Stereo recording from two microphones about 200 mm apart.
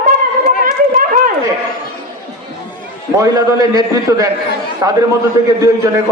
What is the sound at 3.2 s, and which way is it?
A man's voice, 15° right (ahead or behind).